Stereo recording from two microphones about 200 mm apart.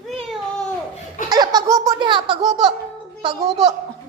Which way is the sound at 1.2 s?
20° right (ahead or behind).